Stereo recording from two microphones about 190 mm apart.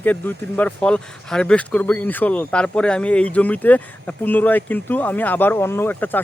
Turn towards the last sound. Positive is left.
turn(degrees=10)  # may be behind; listen again after turning